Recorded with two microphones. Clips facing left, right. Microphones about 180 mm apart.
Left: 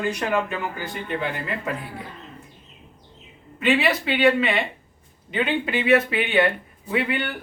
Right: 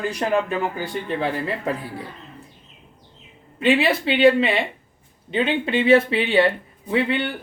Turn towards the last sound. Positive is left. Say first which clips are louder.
# right 3 dB
turn(degrees=-25)  # may be behind; listen again after turning